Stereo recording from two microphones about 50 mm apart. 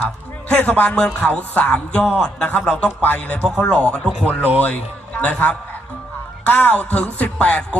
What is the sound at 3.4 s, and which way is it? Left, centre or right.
Speech, centre.